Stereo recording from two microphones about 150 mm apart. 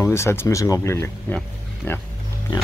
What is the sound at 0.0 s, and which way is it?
Speech, 20° left (ahead or behind).